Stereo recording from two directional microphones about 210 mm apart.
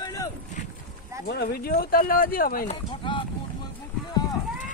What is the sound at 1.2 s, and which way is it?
Speech, 50° left (ahead or behind).